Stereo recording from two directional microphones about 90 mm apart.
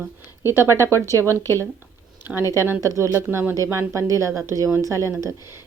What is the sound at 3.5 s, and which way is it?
Speech, 40° right (ahead or behind).